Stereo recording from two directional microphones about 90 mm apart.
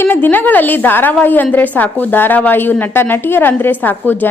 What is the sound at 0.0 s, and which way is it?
A woman's voice, 20° left (ahead or behind).